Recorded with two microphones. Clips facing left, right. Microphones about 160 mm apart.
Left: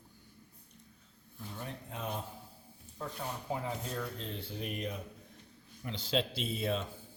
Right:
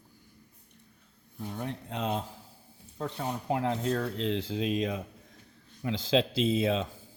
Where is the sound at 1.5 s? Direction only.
80° right.